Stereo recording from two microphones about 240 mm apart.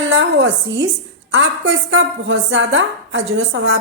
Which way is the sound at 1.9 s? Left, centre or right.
Right.